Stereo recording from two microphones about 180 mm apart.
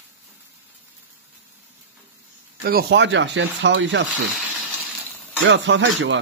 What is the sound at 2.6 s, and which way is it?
Speech, 55° right (ahead or behind).